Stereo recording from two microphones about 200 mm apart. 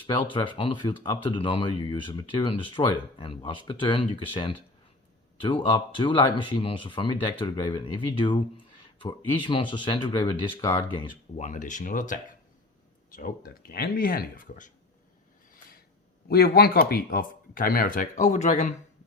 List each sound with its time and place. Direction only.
0.3 s speech: 25° left (ahead or behind)
11.3 s speech: 40° left (ahead or behind)
16.3 s speech: 50° left (ahead or behind)